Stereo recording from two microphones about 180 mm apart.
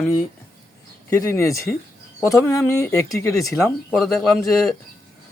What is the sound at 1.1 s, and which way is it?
Speech, 15° left (ahead or behind).